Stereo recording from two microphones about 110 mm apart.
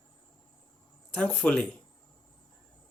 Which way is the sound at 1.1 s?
15° left (ahead or behind).